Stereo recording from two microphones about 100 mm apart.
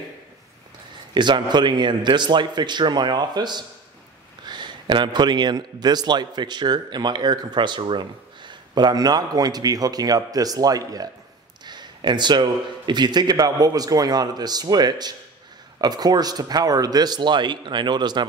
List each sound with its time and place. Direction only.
1.1 s a man's voice: 50° right (ahead or behind)